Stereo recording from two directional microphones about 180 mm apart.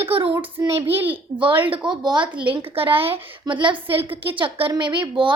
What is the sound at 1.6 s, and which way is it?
A woman's voice, 25° right (ahead or behind).